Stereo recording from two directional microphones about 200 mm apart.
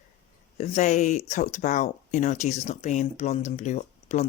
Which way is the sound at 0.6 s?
35° left (ahead or behind).